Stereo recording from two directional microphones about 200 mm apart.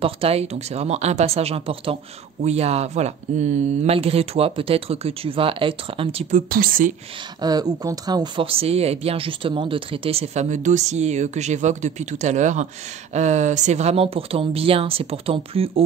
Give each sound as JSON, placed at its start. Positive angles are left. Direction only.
{"t": 0.0, "sound": "speech", "side_deg": -30}
{"t": 6.5, "sound": "speech", "side_deg": -45}
{"t": 7.4, "sound": "speech", "side_deg": -20}